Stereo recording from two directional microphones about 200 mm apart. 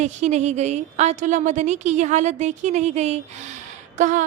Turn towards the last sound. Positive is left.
turn(degrees=-40)  # may be behind; listen again after turning